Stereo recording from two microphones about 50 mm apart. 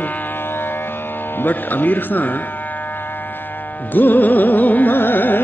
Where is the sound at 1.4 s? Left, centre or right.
Left.